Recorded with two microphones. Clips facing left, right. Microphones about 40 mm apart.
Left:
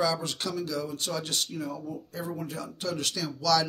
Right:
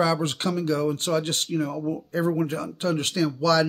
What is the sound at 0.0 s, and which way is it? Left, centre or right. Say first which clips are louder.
Speech: right 5 dB; right.